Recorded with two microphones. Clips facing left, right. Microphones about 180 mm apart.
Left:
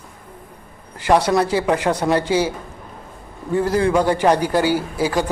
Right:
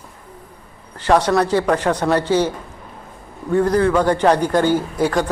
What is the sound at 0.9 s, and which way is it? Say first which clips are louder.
A man's voice: right 1 dB; 10° left (ahead or behind).